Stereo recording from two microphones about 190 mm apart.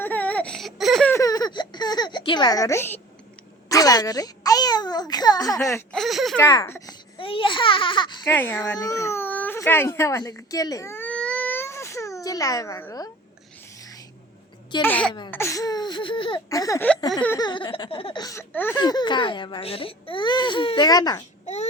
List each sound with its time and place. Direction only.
0.0 s baby cry: 10° left (ahead or behind)
1.1 s a sound: 20° left (ahead or behind)
3.7 s a child's voice: 20° left (ahead or behind)
5.7 s speech: 5° left (ahead or behind)
6.4 s a child's voice: 15° left (ahead or behind)
7.2 s speech: 25° left (ahead or behind)
8.3 s baby cry: 10° left (ahead or behind)
14.8 s a child's voice: 10° left (ahead or behind)
18.8 s speech: 20° left (ahead or behind)
21.4 s speech: 35° left (ahead or behind)